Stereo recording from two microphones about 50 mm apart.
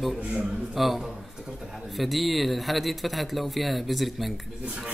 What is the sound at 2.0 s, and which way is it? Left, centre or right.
Speech, centre.